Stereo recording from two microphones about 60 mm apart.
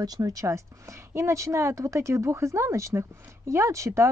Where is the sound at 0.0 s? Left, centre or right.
Right.